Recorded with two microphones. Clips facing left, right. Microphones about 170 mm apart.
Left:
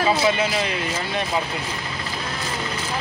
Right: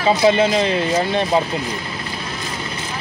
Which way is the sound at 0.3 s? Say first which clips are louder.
Right 7 dB; 30° right (ahead or behind).